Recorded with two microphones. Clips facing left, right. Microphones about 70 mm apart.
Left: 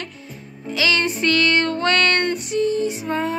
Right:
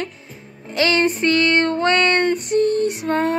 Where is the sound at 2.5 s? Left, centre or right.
Right.